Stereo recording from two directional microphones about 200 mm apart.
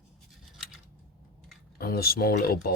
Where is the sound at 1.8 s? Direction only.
50° left (ahead or behind).